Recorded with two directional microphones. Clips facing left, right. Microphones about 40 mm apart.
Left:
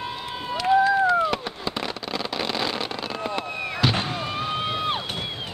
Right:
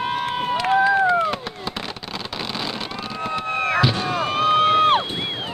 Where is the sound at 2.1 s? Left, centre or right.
Centre.